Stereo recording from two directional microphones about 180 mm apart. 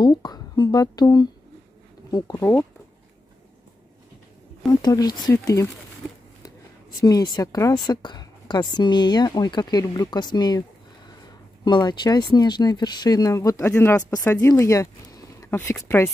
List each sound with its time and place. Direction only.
0.0 s speech: 25° left (ahead or behind)
4.8 s speech: 20° left (ahead or behind)
7.0 s speech: 20° left (ahead or behind)
11.6 s speech: 25° left (ahead or behind)